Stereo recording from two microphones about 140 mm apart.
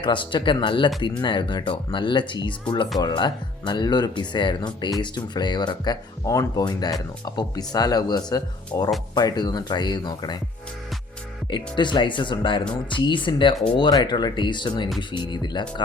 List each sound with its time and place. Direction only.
0.0 s speech: 35° left (ahead or behind)
11.5 s speech: 35° left (ahead or behind)